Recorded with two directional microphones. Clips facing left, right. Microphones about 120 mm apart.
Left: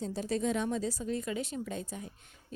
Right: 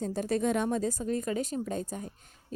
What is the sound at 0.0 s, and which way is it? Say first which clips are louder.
Speech: right 3 dB; 50° right (ahead or behind).